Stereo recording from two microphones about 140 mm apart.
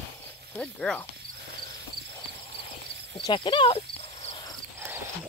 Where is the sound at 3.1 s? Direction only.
35° left (ahead or behind).